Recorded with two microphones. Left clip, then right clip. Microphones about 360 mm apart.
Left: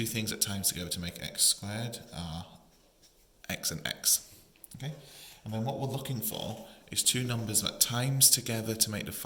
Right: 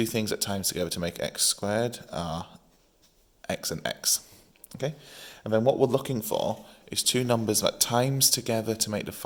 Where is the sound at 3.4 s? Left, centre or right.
Centre.